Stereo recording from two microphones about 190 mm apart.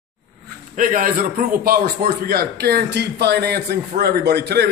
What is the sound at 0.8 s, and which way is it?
A man's voice, 45° right (ahead or behind).